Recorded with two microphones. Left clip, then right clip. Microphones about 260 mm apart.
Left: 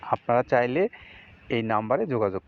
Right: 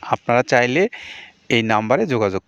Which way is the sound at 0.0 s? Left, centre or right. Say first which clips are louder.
Right 6 dB; right.